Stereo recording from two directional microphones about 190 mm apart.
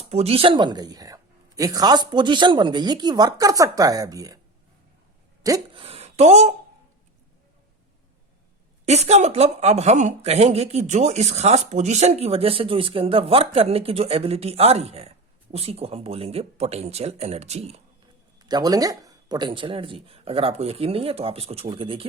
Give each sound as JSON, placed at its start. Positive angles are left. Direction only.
{"t": 0.0, "sound": "a woman's voice", "side_deg": -30}
{"t": 5.4, "sound": "hiccup", "side_deg": -20}
{"t": 5.8, "sound": "speech", "side_deg": -35}
{"t": 8.9, "sound": "a woman's voice", "side_deg": -35}
{"t": 18.3, "sound": "a woman's voice", "side_deg": -20}